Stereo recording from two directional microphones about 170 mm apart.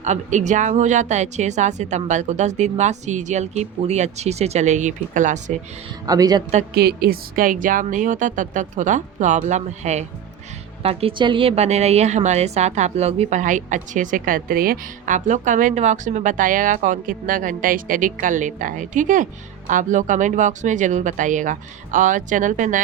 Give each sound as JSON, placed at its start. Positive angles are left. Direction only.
{"t": 0.0, "sound": "a woman's voice", "side_deg": -45}
{"t": 6.1, "sound": "speech", "side_deg": -20}
{"t": 6.7, "sound": "a woman's voice", "side_deg": -65}
{"t": 10.8, "sound": "a woman's voice", "side_deg": -30}